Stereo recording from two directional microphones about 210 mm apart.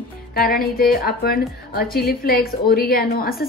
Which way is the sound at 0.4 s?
45° left (ahead or behind).